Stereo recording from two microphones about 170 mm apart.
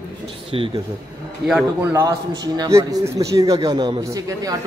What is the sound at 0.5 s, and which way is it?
Speech, 30° right (ahead or behind).